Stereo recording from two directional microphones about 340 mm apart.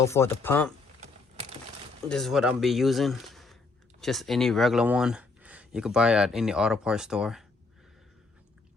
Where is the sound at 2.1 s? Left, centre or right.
Centre.